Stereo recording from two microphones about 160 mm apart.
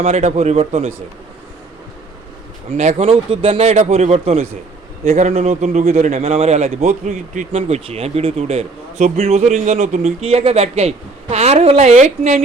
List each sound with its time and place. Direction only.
0.0 s speech: 40° right (ahead or behind)
2.7 s a man's voice: 40° right (ahead or behind)